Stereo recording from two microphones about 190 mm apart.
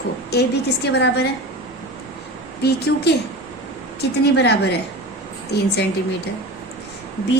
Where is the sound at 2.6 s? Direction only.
60° left (ahead or behind).